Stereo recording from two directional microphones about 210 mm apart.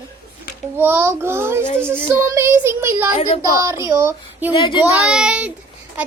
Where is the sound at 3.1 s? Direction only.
30° left (ahead or behind).